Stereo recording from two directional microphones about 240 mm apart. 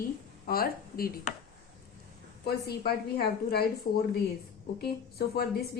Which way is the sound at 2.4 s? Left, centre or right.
Left.